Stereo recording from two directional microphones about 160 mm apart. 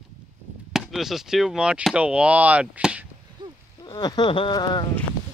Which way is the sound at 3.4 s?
30° right (ahead or behind).